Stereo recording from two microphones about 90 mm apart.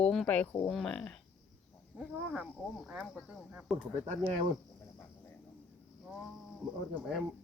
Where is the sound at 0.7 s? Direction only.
5° left (ahead or behind).